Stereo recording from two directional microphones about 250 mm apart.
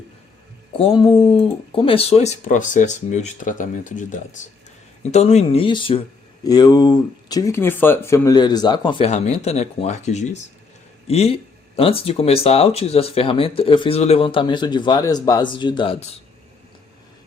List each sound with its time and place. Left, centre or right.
0.8 s speech: left